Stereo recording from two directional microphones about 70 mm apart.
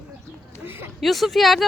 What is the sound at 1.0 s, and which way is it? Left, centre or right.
Speech, centre.